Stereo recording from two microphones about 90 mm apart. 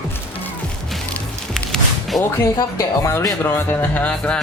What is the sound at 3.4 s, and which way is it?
Speech, 25° left (ahead or behind).